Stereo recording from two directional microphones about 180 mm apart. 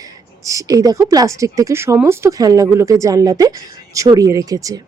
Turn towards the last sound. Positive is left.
turn(degrees=-20)  # may be behind; listen again after turning